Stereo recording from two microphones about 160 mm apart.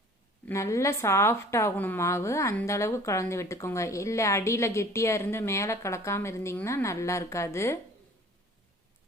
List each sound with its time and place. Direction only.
0.4 s a woman's voice: 20° left (ahead or behind)